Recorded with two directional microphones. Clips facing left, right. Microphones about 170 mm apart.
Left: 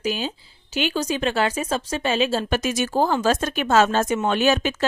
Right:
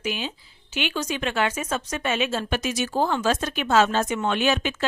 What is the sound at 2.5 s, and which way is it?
A woman's voice, 50° left (ahead or behind).